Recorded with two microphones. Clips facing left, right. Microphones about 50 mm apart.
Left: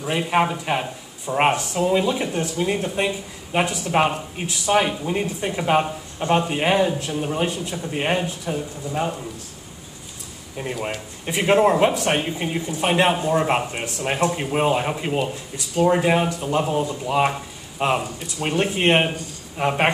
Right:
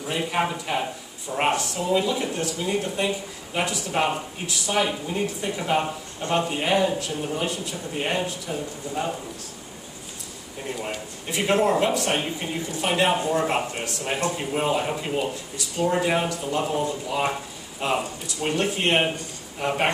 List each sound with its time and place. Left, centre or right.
0.0 s speech: left
11.2 s speech: left
17.7 s speech: left